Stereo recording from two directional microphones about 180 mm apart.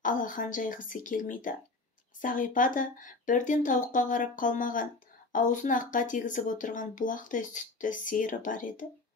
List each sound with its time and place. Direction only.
0.0 s speech: 45° left (ahead or behind)